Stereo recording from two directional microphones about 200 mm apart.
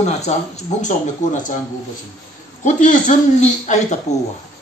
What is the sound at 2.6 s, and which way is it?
A man's voice, 40° left (ahead or behind).